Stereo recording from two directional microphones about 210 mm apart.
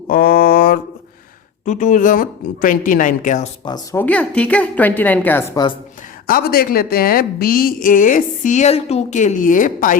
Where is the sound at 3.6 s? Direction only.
20° left (ahead or behind).